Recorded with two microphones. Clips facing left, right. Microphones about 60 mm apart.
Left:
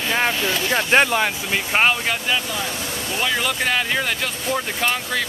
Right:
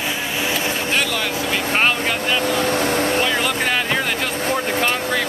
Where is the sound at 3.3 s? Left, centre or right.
Centre.